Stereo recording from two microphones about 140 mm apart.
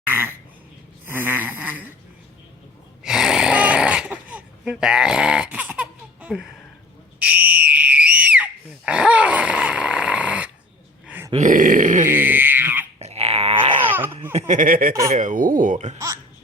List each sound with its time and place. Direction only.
0.1 s a sound: 15° right (ahead or behind)
1.0 s snoring: 15° right (ahead or behind)
3.0 s snoring: 5° right (ahead or behind)
7.2 s a sound: 10° right (ahead or behind)
11.3 s speech: 70° right (ahead or behind)
12.0 s frog: 15° right (ahead or behind)
13.0 s a sound: 50° right (ahead or behind)
14.3 s speech: 60° right (ahead or behind); by 14.9 s 85° right
15.1 s speech: 65° right (ahead or behind)